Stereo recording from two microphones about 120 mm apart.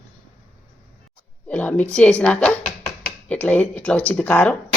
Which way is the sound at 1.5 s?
10° left (ahead or behind).